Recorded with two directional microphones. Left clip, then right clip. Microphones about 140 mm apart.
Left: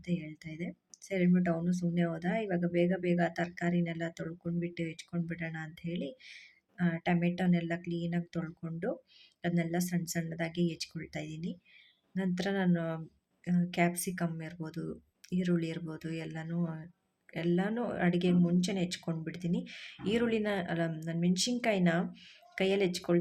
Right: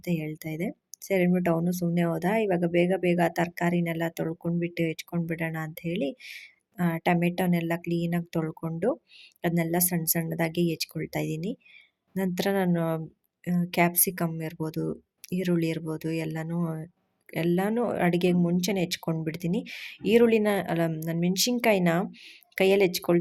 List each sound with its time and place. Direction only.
0.0 s speech: 40° right (ahead or behind)